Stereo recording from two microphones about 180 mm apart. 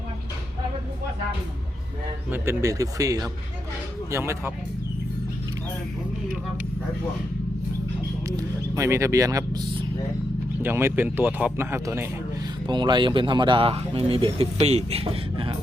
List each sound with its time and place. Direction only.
2.3 s speech: 15° right (ahead or behind)
8.3 s speech: 15° right (ahead or behind)
12.6 s speech: 25° right (ahead or behind)